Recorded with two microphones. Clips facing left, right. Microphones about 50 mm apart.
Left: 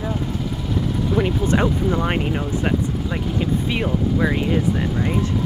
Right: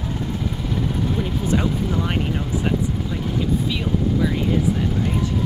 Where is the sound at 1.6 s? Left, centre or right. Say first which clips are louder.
Left 3 dB; left.